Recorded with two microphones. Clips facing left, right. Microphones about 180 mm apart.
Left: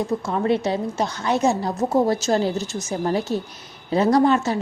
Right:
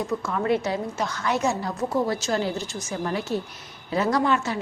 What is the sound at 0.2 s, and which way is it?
A woman's voice, 30° left (ahead or behind).